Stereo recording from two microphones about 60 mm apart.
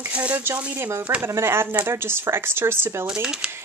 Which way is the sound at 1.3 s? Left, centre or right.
Right.